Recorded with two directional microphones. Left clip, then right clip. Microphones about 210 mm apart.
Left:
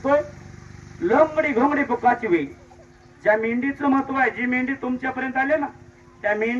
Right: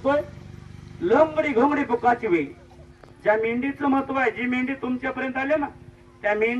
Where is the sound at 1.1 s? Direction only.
30° left (ahead or behind).